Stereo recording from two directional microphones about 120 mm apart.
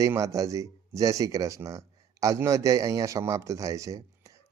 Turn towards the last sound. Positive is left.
turn(degrees=-25)  # may be behind; listen again after turning